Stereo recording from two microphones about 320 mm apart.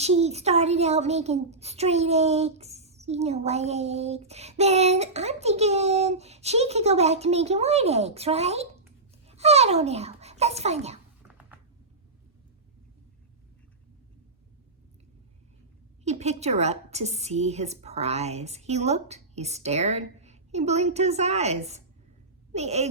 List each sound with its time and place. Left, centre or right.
0.0 s a woman's voice: centre
11.3 s a sound: centre
16.0 s a woman's voice: right